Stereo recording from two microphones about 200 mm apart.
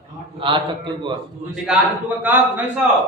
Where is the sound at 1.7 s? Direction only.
5° right (ahead or behind).